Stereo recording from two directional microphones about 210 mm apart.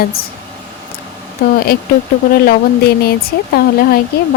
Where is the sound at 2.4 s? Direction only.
45° left (ahead or behind).